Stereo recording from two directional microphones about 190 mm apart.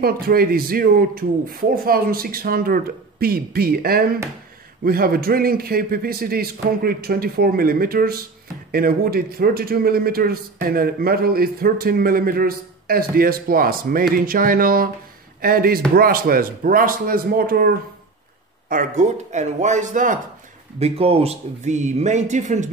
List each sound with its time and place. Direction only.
0.0 s speech: 50° right (ahead or behind)
18.7 s speech: 40° right (ahead or behind)
20.8 s speech: 30° right (ahead or behind)